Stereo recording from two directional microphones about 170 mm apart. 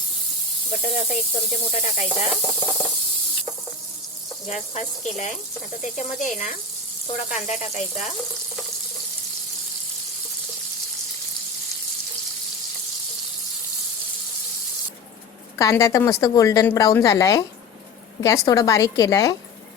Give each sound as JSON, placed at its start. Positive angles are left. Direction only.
{"t": 0.7, "sound": "snake", "side_deg": 35}
{"t": 4.4, "sound": "speech", "side_deg": 40}
{"t": 15.5, "sound": "a woman's voice", "side_deg": 20}